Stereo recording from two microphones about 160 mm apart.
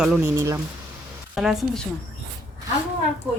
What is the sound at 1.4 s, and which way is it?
Speech, centre (ahead or behind).